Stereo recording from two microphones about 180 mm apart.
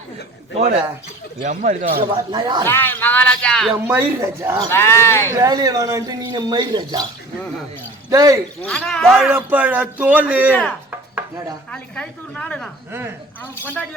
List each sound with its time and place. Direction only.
1.4 s a man's voice: 45° right (ahead or behind)
2.0 s a man's voice: 25° right (ahead or behind)
2.6 s speech: 10° left (ahead or behind)
3.8 s a man's voice: 15° right (ahead or behind)
4.7 s speech: 15° left (ahead or behind)
5.3 s a man's voice: 20° right (ahead or behind)
8.1 s a man's voice: 20° right (ahead or behind)
8.6 s a woman's voice: 5° left (ahead or behind)
9.1 s a man's voice: 10° right (ahead or behind)
10.5 s speech: 5° left (ahead or behind)
11.1 s chopping: 20° right (ahead or behind)
11.7 s a woman's voice: 5° left (ahead or behind)
12.9 s a man's voice: 10° right (ahead or behind)
13.4 s speech: 10° left (ahead or behind)